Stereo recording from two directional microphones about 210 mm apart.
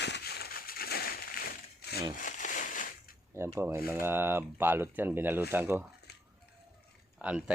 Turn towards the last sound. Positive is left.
turn(degrees=-5)  # may be behind; listen again after turning